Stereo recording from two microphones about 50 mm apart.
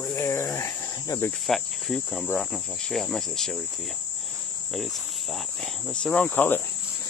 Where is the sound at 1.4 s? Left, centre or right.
Centre.